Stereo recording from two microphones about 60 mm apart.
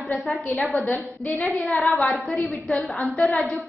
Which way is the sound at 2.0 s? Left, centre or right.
Centre.